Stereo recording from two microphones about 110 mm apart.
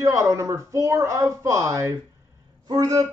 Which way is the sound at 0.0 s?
30° right (ahead or behind).